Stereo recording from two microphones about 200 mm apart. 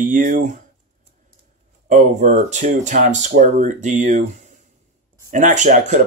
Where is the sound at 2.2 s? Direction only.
35° right (ahead or behind).